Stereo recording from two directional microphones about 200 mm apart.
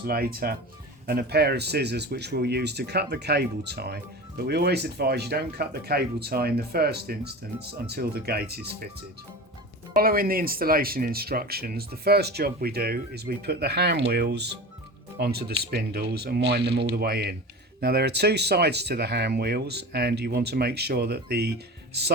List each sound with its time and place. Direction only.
0.0 s speech: 50° right (ahead or behind)
10.0 s speech: 45° right (ahead or behind)